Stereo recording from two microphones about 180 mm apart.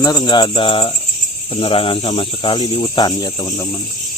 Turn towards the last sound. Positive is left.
turn(degrees=20)  # may be behind; listen again after turning